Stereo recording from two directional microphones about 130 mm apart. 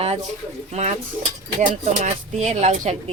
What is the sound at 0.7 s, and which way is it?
Speech, 60° right (ahead or behind).